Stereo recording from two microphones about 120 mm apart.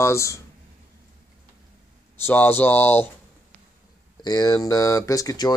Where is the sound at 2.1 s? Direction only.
20° left (ahead or behind).